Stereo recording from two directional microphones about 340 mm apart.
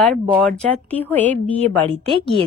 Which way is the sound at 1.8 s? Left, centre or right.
Centre.